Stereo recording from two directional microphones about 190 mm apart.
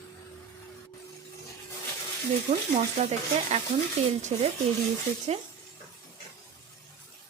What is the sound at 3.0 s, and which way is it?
Speech, 35° right (ahead or behind).